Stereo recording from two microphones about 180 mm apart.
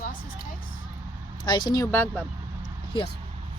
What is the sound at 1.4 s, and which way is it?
Speech, 25° left (ahead or behind).